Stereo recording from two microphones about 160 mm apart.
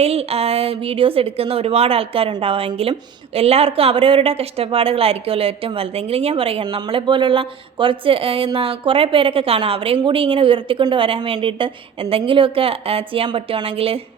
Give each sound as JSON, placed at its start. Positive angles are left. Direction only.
{"t": 0.0, "sound": "a woman's voice", "side_deg": -40}